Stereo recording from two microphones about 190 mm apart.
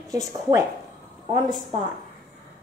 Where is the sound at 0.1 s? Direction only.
20° right (ahead or behind).